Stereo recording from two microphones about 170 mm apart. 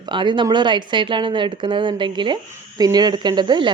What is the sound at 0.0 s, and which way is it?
Speech, 25° right (ahead or behind).